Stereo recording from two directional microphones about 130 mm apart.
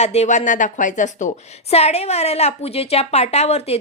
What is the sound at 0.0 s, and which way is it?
Speech, 60° left (ahead or behind).